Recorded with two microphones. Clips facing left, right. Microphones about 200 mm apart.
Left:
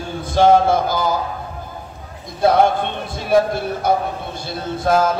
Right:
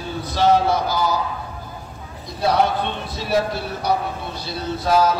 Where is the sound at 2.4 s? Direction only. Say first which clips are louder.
Left 4 dB; 50° left (ahead or behind).